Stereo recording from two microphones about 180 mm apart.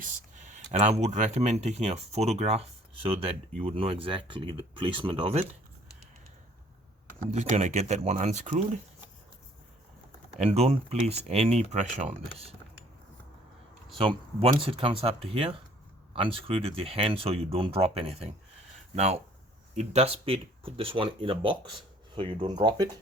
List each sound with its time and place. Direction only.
0.5 s speech: 40° right (ahead or behind)
7.3 s speech: 40° right (ahead or behind)
10.3 s speech: 35° right (ahead or behind)
14.0 s speech: 30° right (ahead or behind)
19.7 s speech: 40° right (ahead or behind); by 22.9 s 25° right (ahead or behind)